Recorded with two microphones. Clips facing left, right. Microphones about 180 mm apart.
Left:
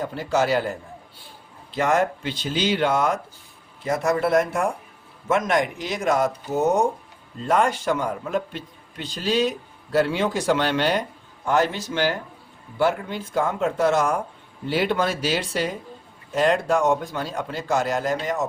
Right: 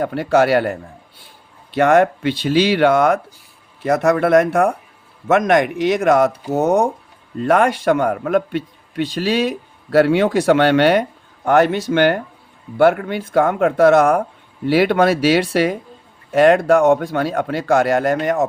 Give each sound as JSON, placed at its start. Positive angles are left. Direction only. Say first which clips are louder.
{"t": 0.0, "sound": "a man's voice", "louder": "right 7 dB", "side_deg": -60}